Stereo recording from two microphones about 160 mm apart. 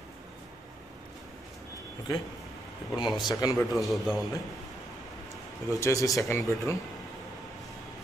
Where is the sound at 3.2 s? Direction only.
25° left (ahead or behind).